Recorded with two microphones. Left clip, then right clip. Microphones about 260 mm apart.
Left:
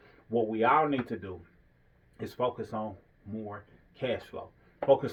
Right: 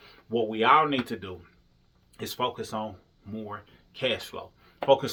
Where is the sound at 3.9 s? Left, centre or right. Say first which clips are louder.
Right 4 dB; right.